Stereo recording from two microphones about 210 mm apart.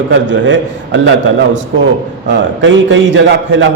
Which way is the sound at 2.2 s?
60° right (ahead or behind).